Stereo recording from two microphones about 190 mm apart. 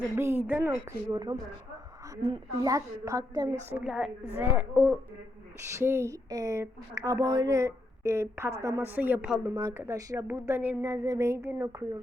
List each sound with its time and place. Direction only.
0.2 s speech: 10° right (ahead or behind)
3.7 s a woman's voice: 5° right (ahead or behind)